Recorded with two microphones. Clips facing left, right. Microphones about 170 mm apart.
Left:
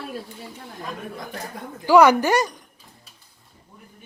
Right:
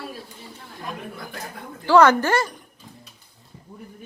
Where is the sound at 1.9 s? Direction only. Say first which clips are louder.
Left 1 dB; 10° left (ahead or behind).